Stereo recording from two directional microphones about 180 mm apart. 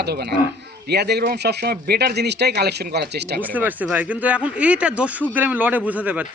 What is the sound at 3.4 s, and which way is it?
Speech, 10° right (ahead or behind).